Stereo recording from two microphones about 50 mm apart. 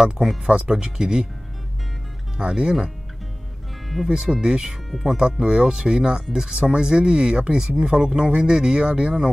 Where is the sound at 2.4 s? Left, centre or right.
Centre.